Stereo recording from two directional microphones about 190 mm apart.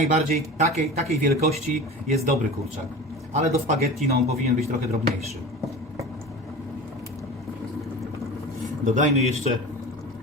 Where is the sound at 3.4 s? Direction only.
35° right (ahead or behind).